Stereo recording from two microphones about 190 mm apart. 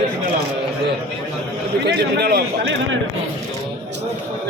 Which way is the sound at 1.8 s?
60° right (ahead or behind).